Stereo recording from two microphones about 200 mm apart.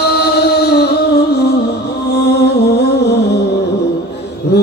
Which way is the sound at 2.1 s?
55° left (ahead or behind).